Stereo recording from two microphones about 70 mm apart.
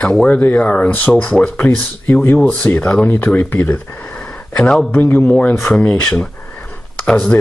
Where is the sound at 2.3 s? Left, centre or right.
Centre.